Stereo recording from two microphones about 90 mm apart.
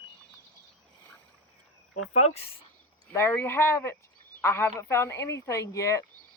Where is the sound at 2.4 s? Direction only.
90° left.